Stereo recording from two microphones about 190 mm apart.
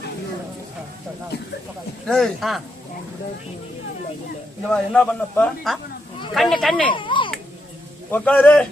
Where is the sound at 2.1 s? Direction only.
Centre (ahead or behind).